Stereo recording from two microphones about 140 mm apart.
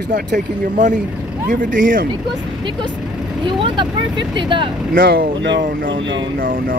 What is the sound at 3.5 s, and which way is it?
Speech, 35° right (ahead or behind).